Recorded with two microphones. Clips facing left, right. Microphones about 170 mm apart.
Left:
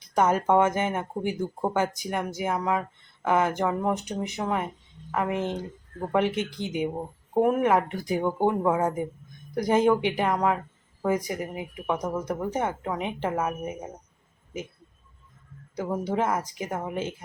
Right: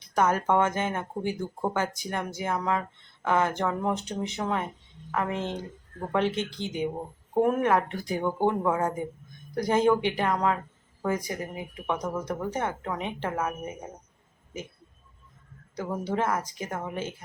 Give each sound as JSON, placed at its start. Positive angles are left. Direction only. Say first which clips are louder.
{"t": 0.1, "sound": "speech", "louder": "left 2 dB", "side_deg": 20}
{"t": 15.7, "sound": "speech", "louder": "left 2 dB", "side_deg": 10}